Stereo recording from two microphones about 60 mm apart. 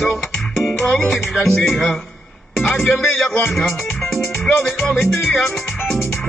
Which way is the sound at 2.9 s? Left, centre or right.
Centre.